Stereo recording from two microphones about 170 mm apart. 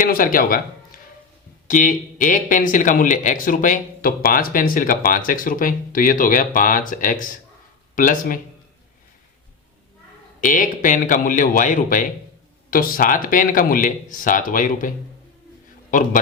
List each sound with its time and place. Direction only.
0.0 s a man's voice: 55° left (ahead or behind)
10.4 s speech: 50° left (ahead or behind)
15.9 s speech: 50° left (ahead or behind)